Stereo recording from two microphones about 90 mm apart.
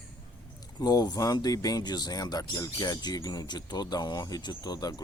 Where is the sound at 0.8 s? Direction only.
45° left (ahead or behind).